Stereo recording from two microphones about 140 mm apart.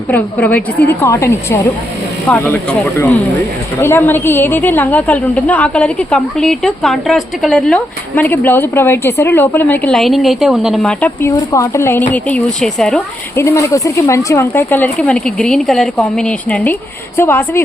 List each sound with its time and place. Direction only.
0.1 s a woman's voice: 10° left (ahead or behind)
8.1 s a woman's voice: 10° left (ahead or behind)
9.9 s speech: centre (ahead or behind)
11.0 s a woman's voice: 15° left (ahead or behind)
13.3 s a woman's voice: 20° left (ahead or behind)